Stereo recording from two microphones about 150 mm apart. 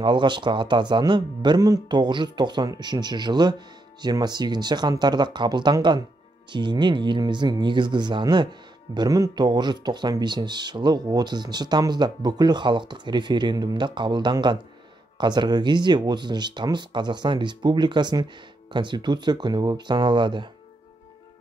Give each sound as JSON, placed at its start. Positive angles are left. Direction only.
{"t": 0.0, "sound": "speech", "side_deg": -30}